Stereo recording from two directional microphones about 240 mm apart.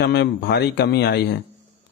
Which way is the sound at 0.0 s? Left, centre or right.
Left.